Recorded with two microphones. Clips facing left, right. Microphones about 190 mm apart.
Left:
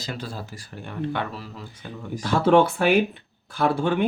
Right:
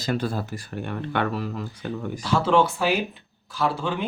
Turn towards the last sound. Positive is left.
turn(degrees=55)  # may be behind; listen again after turning